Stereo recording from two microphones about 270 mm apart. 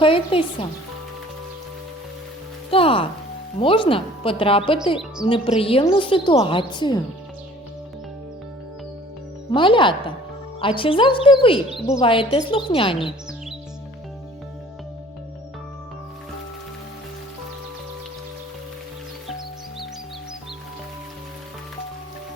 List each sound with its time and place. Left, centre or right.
0.0 s a woman's voice: centre
2.6 s a woman's voice: centre
9.5 s a woman's voice: centre